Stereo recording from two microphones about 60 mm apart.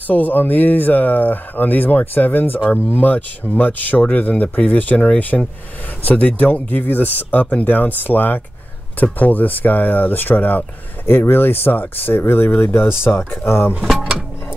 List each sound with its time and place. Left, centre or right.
0.0 s speech: left
6.0 s speech: left